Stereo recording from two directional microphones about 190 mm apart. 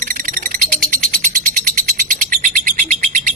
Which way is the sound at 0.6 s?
50° right (ahead or behind).